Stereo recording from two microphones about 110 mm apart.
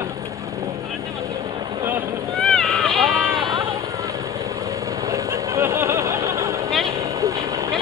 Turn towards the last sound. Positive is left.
turn(degrees=-30)  # may be behind; listen again after turning